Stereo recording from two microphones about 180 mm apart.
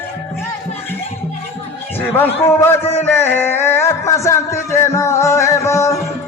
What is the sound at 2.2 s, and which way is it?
Speech, 10° left (ahead or behind).